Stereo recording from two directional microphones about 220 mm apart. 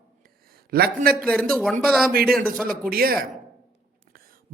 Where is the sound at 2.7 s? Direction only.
40° right (ahead or behind).